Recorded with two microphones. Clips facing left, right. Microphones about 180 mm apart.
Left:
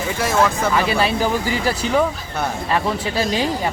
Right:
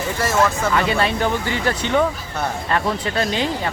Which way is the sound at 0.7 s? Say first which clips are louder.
Left 1 dB; 5° left (ahead or behind).